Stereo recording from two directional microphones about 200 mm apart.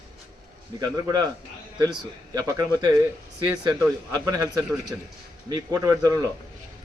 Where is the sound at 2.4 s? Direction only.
20° right (ahead or behind).